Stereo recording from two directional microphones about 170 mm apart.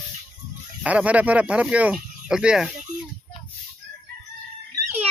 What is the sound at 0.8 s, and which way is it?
Speech, 5° right (ahead or behind).